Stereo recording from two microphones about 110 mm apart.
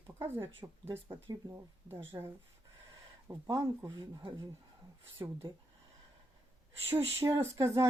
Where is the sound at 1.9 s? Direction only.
20° right (ahead or behind).